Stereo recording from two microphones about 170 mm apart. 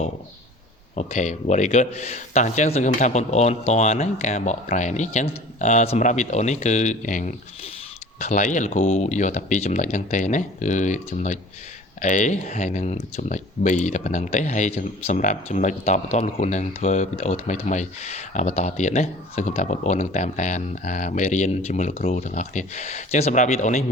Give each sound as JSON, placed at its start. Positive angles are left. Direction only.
{"t": 0.9, "sound": "speech", "side_deg": 45}